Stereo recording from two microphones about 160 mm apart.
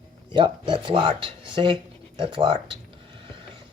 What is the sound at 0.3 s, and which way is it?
Speech, 30° right (ahead or behind).